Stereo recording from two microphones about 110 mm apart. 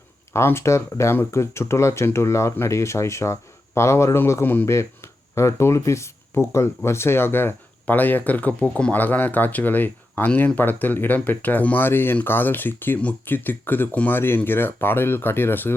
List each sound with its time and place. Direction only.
0.3 s speech: 25° left (ahead or behind)